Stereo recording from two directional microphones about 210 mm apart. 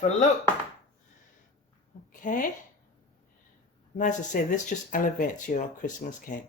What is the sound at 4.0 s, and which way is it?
Speech, 35° left (ahead or behind).